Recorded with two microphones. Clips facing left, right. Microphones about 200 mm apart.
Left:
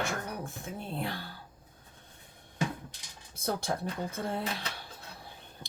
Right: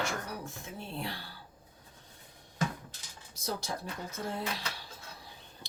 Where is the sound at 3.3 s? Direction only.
55° left (ahead or behind).